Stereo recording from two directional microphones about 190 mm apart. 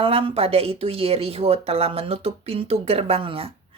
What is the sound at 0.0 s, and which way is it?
Speech, 30° right (ahead or behind).